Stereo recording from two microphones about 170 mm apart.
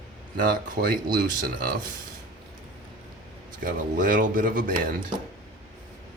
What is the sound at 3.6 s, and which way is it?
Speech, 55° right (ahead or behind).